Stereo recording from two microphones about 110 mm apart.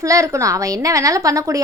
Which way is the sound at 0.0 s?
30° right (ahead or behind).